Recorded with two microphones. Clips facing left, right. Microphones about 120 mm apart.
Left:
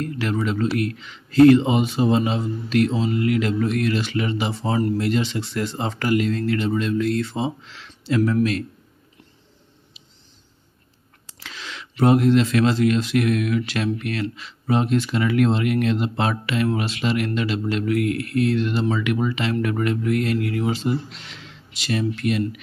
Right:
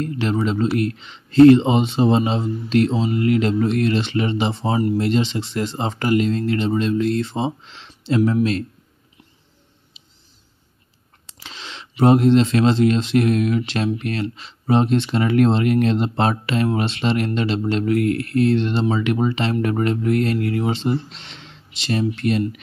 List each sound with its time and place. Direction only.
0.0 s speech: 25° right (ahead or behind)
11.2 s a sound: 25° right (ahead or behind)
12.0 s speech: 25° right (ahead or behind)